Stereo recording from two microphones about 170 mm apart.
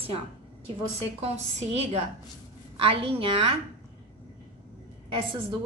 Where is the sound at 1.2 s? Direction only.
35° right (ahead or behind).